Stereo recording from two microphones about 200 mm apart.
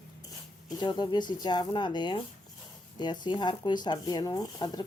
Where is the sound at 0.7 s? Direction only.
20° left (ahead or behind).